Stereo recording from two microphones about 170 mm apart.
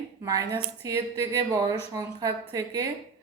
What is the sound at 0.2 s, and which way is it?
A woman's voice, 20° right (ahead or behind).